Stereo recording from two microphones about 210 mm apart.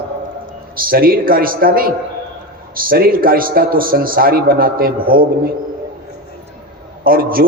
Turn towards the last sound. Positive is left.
turn(degrees=-45)  # may be behind; listen again after turning